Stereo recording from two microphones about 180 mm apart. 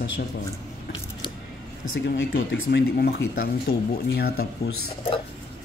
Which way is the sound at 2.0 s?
85° left.